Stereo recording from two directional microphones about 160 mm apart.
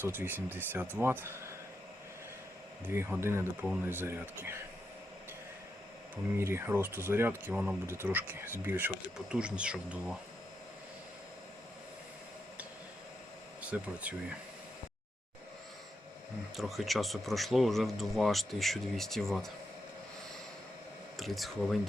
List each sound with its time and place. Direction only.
0.0 s speech: 10° right (ahead or behind)
2.9 s speech: 15° right (ahead or behind)
6.3 s speech: 15° right (ahead or behind)
13.6 s speech: 10° right (ahead or behind)
16.6 s speech: centre (ahead or behind)
21.2 s speech: centre (ahead or behind)